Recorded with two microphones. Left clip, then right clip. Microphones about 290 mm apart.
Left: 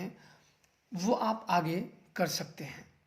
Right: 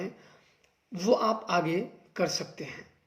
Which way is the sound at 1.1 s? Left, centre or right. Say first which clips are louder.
Right 4 dB; left.